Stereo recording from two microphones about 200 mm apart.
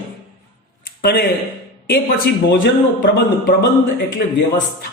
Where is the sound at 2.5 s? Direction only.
45° left (ahead or behind).